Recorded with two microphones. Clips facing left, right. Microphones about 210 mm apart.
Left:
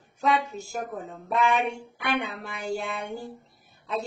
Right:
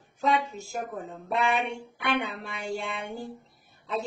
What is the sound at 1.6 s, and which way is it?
Child singing, centre (ahead or behind).